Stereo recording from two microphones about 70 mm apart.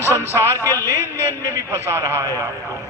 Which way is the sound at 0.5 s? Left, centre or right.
Left.